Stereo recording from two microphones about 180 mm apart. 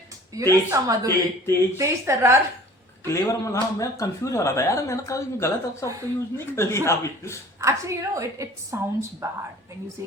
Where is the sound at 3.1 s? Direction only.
15° left (ahead or behind).